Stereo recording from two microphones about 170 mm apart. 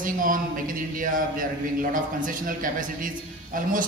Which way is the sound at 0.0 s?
55° right (ahead or behind).